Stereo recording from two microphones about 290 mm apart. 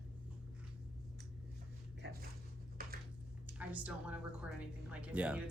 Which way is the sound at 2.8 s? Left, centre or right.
Right.